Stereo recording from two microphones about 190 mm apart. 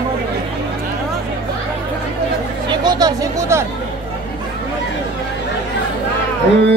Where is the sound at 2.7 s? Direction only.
20° right (ahead or behind).